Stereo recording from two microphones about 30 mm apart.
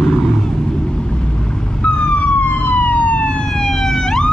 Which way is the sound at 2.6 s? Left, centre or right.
Left.